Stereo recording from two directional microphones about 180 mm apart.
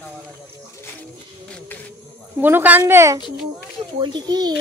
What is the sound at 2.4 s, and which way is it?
A child's voice, 10° right (ahead or behind).